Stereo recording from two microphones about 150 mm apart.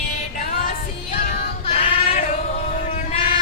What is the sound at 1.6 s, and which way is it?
Female singing, 45° left (ahead or behind).